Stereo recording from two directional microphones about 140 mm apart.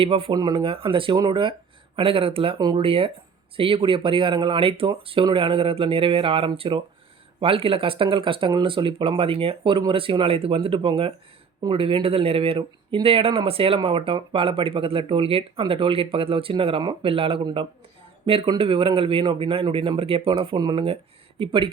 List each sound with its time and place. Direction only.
0.0 s speech: 40° right (ahead or behind)